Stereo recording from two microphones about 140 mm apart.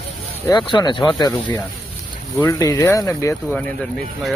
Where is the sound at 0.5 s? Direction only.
30° left (ahead or behind).